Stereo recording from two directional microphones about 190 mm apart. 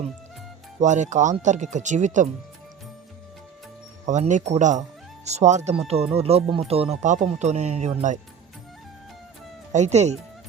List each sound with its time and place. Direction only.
0.8 s speech: 40° right (ahead or behind)
4.0 s speech: 40° right (ahead or behind)
9.7 s speech: 35° right (ahead or behind)